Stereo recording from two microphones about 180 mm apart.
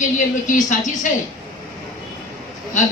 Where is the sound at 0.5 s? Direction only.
45° left (ahead or behind).